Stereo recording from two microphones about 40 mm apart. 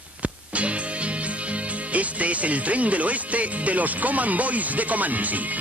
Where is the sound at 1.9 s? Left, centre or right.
Right.